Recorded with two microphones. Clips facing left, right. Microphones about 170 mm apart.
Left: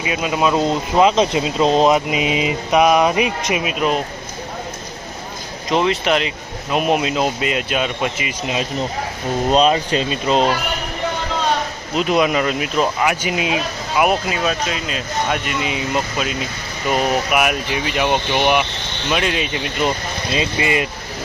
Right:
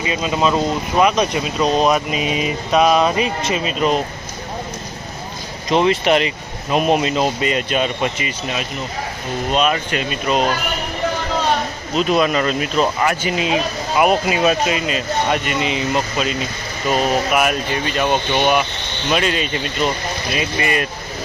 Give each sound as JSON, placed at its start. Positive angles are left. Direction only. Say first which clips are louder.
{"t": 0.0, "sound": "speech", "louder": "even", "side_deg": 10}
{"t": 5.6, "sound": "speech", "louder": "right 2 dB", "side_deg": 0}
{"t": 9.5, "sound": "speech", "louder": "left 3 dB", "side_deg": 30}
{"t": 11.9, "sound": "speech", "louder": "even", "side_deg": 15}
{"t": 20.3, "sound": "speech", "louder": "left 2 dB", "side_deg": 20}